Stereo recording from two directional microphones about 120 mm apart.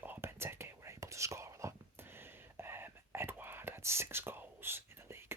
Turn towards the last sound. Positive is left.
turn(degrees=-20)  # may be behind; listen again after turning